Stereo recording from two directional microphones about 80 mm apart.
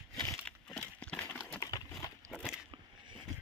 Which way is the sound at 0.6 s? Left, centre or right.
Centre.